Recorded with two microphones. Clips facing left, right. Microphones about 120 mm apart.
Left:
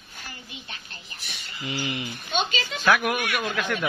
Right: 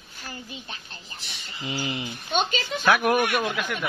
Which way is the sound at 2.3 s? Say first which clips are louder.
Right 2 dB; 45° right (ahead or behind).